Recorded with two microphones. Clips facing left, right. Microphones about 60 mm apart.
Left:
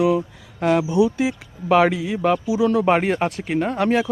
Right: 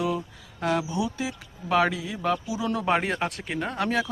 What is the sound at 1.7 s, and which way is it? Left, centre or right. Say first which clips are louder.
Speech: left 7 dB; left.